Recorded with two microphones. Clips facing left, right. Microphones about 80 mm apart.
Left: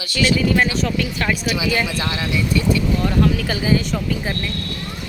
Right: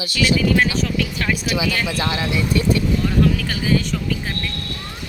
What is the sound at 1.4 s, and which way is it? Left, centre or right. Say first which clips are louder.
Speech: left 1 dB; centre.